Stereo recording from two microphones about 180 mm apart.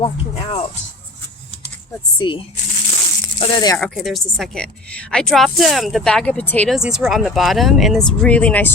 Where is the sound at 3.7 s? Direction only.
Centre (ahead or behind).